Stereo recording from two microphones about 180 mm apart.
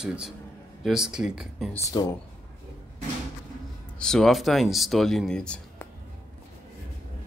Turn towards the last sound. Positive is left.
turn(degrees=5)  # may be behind; listen again after turning